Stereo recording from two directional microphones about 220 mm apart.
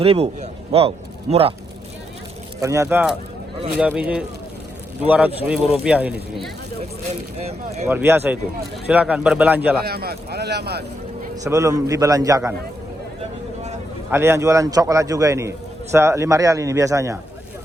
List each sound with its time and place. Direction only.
0.0 s a man's voice: 25° right (ahead or behind)
2.6 s a man's voice: 15° right (ahead or behind)
7.9 s a man's voice: 10° right (ahead or behind)
9.8 s speech: 45° right (ahead or behind)
11.4 s a man's voice: 15° right (ahead or behind)
14.1 s a man's voice: 10° right (ahead or behind)